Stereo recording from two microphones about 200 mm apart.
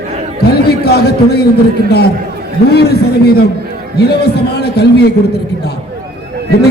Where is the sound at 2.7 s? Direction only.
55° left (ahead or behind).